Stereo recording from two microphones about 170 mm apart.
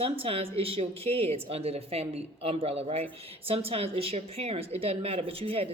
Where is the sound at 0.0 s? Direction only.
35° right (ahead or behind).